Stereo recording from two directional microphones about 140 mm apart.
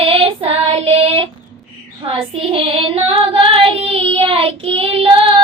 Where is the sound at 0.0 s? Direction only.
40° right (ahead or behind).